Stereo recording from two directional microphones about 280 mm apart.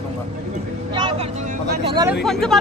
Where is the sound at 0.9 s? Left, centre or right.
Centre.